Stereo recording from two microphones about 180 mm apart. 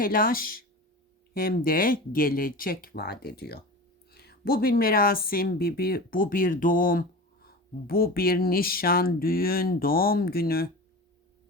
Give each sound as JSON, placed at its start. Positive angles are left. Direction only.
{"t": 0.0, "sound": "speech", "side_deg": 50}